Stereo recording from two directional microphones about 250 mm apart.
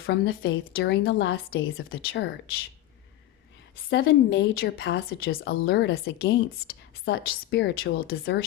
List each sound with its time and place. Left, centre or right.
0.0 s speech: left
3.8 s speech: left